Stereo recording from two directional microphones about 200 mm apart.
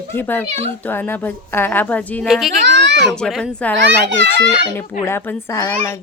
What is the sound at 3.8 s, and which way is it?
Speech, 60° right (ahead or behind).